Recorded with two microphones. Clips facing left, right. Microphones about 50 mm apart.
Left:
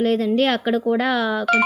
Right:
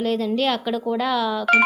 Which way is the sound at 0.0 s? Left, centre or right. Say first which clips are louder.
Left 3 dB; left.